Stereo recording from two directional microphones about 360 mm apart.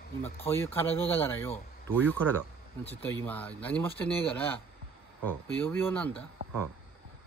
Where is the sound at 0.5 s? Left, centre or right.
Centre.